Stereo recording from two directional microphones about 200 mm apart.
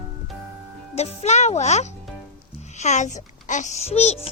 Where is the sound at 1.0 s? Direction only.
35° left (ahead or behind).